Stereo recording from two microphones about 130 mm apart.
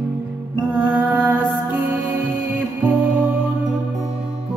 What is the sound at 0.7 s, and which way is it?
Music, 10° right (ahead or behind).